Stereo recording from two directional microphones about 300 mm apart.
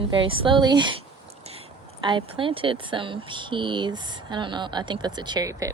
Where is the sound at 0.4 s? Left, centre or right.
Centre.